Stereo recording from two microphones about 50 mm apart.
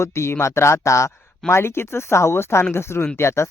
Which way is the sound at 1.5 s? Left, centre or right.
Left.